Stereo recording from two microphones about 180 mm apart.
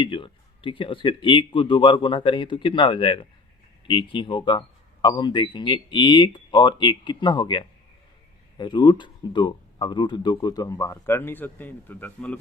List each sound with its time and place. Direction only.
0.0 s speech: 30° left (ahead or behind); by 12.4 s 10° left (ahead or behind)